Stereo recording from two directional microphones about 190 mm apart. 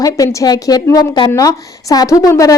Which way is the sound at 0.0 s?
20° left (ahead or behind).